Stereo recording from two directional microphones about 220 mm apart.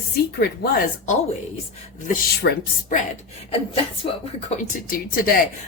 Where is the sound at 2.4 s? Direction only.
35° left (ahead or behind).